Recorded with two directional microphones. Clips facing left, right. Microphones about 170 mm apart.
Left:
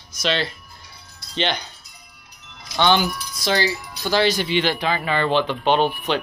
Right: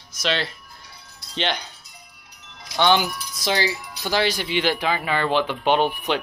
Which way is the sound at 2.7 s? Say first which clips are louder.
Left 1 dB; 10° right (ahead or behind).